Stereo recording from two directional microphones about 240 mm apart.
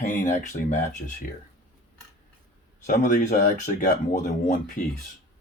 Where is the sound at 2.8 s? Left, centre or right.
Left.